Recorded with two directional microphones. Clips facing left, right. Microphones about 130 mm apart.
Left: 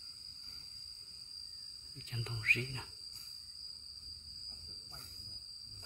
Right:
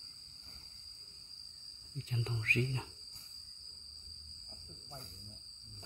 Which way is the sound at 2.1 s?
Centre (ahead or behind).